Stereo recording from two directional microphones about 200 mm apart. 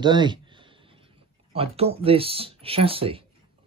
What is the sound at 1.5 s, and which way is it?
Speech, 30° right (ahead or behind).